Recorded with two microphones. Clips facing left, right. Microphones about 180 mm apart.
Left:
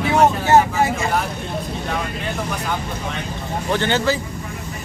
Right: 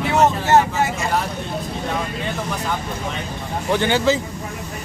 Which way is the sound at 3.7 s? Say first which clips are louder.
Right 2 dB; 15° right (ahead or behind).